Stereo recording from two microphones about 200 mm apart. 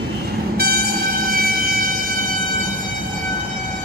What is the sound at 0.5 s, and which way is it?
Train, 50° right (ahead or behind).